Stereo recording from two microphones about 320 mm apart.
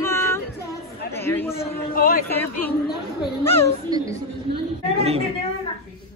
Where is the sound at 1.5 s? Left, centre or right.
Left.